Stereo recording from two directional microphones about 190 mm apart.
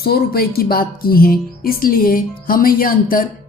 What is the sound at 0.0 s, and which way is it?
Speech, 55° left (ahead or behind).